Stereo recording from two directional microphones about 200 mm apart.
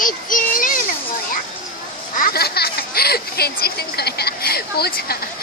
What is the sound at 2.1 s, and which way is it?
Speech, 50° left (ahead or behind).